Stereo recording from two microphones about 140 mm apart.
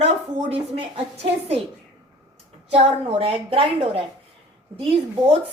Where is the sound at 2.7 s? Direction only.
45° right (ahead or behind).